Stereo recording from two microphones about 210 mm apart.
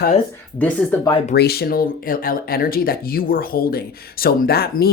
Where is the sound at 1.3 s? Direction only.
50° left (ahead or behind).